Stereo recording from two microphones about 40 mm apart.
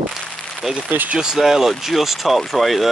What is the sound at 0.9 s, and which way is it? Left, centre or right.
Speech, right.